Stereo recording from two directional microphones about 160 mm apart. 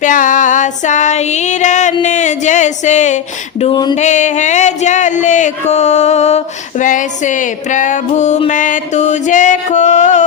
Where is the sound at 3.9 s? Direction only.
50° left (ahead or behind).